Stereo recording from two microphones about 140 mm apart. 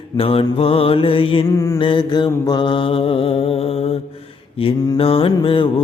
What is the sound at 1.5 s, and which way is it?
Mantra, 20° left (ahead or behind).